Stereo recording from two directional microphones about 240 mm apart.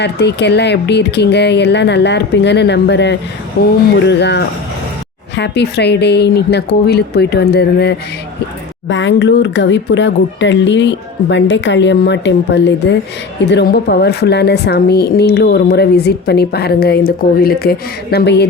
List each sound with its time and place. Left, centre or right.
0.0 s a woman's voice: left